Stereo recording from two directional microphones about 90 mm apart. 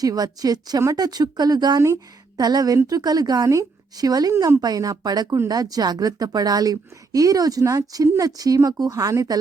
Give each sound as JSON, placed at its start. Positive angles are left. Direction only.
{"t": 0.0, "sound": "speech", "side_deg": -45}